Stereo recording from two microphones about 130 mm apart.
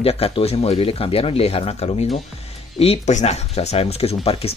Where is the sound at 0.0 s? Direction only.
50° left (ahead or behind).